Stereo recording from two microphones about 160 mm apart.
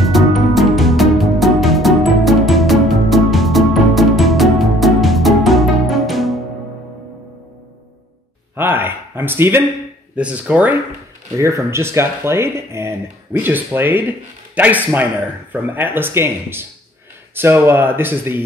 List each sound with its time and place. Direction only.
0.0 s music: centre (ahead or behind)
8.5 s a sound: 15° right (ahead or behind)
10.1 s a man's voice: 10° right (ahead or behind)